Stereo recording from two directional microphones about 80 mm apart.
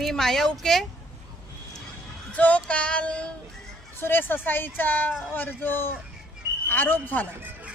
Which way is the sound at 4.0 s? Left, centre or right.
Left.